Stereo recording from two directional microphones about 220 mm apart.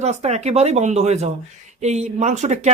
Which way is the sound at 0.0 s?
30° right (ahead or behind).